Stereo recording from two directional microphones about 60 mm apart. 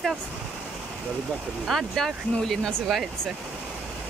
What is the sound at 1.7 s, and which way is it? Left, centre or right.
Speech, centre.